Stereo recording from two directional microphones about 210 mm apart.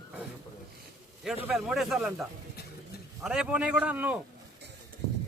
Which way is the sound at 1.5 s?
Centre (ahead or behind).